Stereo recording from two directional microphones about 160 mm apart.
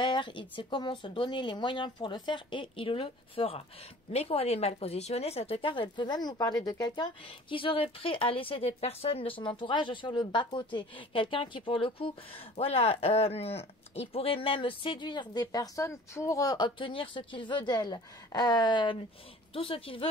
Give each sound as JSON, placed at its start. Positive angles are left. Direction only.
{"t": 0.0, "sound": "speech", "side_deg": 30}